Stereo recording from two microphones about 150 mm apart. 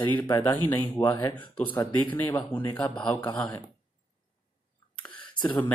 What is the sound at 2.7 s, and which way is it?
Speech, 10° left (ahead or behind).